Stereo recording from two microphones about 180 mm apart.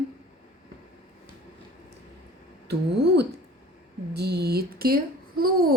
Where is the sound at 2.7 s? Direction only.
65° right (ahead or behind).